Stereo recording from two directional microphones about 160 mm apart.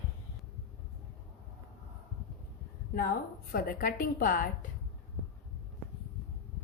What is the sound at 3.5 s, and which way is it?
Speech, 65° left (ahead or behind).